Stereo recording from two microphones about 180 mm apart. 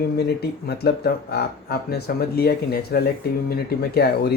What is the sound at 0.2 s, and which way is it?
Speech, 65° left (ahead or behind).